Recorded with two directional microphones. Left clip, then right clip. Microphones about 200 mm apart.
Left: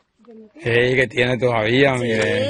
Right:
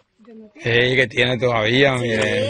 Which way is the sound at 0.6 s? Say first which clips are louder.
Even; 15° left (ahead or behind).